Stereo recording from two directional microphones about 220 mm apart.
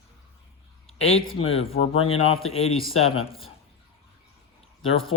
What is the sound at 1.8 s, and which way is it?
Speech, 45° left (ahead or behind).